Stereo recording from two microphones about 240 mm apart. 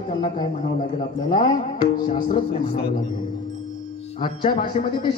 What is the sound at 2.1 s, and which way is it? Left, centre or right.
Speech, left.